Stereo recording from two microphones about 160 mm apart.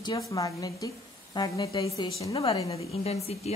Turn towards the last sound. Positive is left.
turn(degrees=40)  # may be behind; listen again after turning